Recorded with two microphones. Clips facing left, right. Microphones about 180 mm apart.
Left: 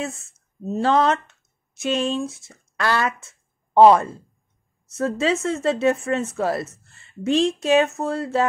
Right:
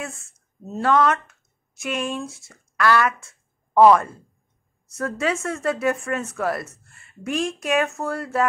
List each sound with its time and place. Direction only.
0.7 s speech: 25° left (ahead or behind)